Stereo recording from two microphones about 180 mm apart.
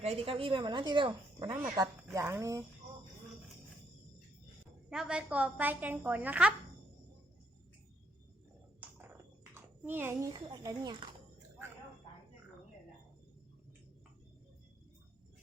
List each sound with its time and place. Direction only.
0.0 s a woman's voice: 35° right (ahead or behind)
2.1 s a woman's voice: 15° right (ahead or behind)
4.9 s a woman's voice: 5° right (ahead or behind)
8.8 s a sound: 15° right (ahead or behind)
10.3 s a woman's voice: 20° right (ahead or behind)